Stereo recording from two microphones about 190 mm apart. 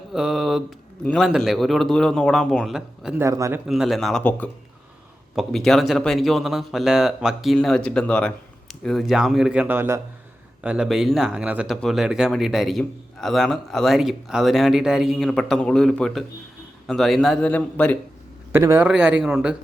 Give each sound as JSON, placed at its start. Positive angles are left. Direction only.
{"t": 0.1, "sound": "mantra", "side_deg": 0}
{"t": 1.0, "sound": "speech", "side_deg": 5}
{"t": 3.2, "sound": "speech", "side_deg": -15}
{"t": 3.7, "sound": "speech", "side_deg": 0}
{"t": 18.5, "sound": "speech", "side_deg": -15}